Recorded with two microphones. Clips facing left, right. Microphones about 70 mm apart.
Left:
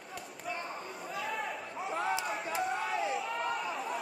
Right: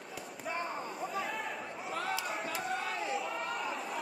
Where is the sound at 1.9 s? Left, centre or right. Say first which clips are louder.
Left 3 dB; centre.